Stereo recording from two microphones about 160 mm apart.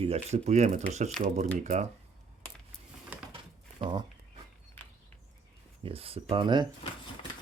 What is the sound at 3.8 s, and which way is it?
Speech, 30° right (ahead or behind).